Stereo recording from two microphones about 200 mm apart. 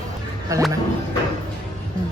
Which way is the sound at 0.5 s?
15° right (ahead or behind).